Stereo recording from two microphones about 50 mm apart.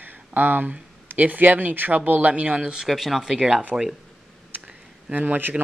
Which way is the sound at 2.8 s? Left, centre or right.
Centre.